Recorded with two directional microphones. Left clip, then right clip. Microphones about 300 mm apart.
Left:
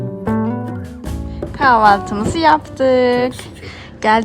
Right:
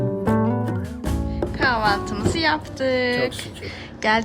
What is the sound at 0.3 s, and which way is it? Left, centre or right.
Music, centre.